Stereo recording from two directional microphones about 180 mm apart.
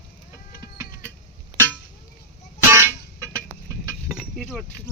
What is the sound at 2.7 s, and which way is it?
Music, 15° right (ahead or behind).